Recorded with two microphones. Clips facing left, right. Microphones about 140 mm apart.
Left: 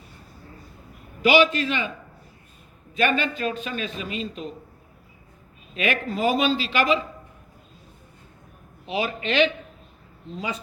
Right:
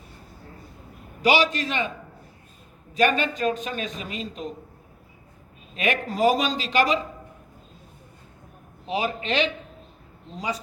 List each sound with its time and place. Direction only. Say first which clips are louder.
1.2 s a man's voice: left 3 dB; 40° right (ahead or behind)
2.9 s a man's voice: right 1 dB; 40° right (ahead or behind)
5.7 s a man's voice: even; 40° right (ahead or behind)
8.9 s a man's voice: even; 35° right (ahead or behind)